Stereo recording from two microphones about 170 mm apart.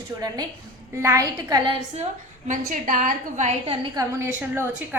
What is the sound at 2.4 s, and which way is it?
A woman's voice, 45° right (ahead or behind).